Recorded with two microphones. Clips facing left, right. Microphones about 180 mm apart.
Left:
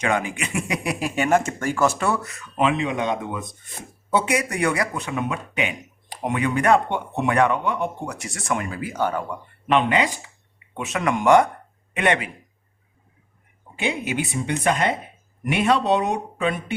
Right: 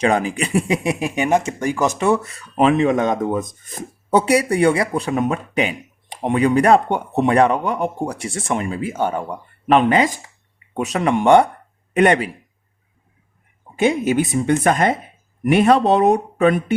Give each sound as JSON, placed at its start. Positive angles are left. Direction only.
{"t": 0.0, "sound": "speech", "side_deg": -35}
{"t": 9.6, "sound": "speech", "side_deg": -40}
{"t": 13.7, "sound": "speech", "side_deg": -45}